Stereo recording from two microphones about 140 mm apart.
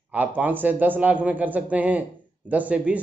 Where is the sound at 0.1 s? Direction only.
10° right (ahead or behind).